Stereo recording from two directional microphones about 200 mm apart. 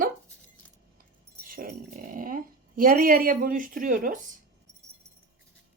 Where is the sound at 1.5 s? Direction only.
45° right (ahead or behind).